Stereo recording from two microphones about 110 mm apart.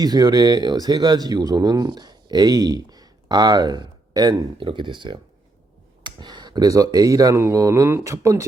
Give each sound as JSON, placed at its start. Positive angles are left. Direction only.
{"t": 0.0, "sound": "speech", "side_deg": -35}